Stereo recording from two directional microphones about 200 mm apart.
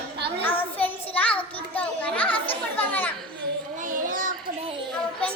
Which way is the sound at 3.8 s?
40° right (ahead or behind).